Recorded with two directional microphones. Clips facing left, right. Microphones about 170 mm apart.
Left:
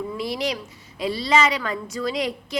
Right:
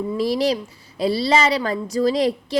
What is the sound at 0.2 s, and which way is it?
A woman's voice, 35° right (ahead or behind).